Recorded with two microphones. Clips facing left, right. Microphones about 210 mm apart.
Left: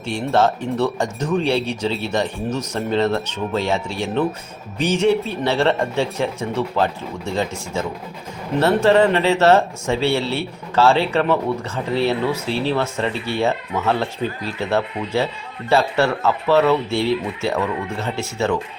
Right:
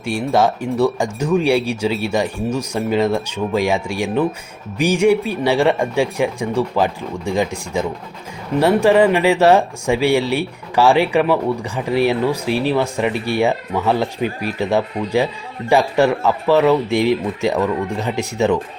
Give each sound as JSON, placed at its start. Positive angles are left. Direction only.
{"t": 0.0, "sound": "speech", "side_deg": -10}